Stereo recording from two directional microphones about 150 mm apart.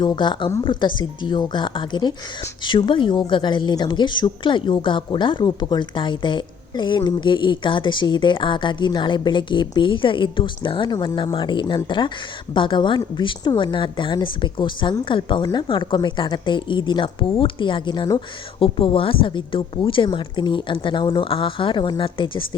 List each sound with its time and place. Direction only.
0.0 s a woman's voice: 30° left (ahead or behind)